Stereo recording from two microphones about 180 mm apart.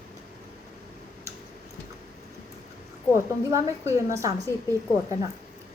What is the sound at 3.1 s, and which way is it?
A woman's voice, 15° right (ahead or behind).